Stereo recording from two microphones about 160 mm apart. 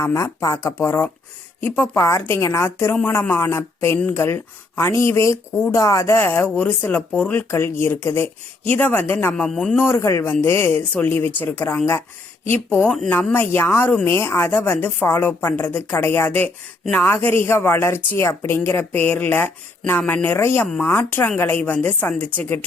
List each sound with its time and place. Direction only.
0.0 s a woman's voice: 20° left (ahead or behind)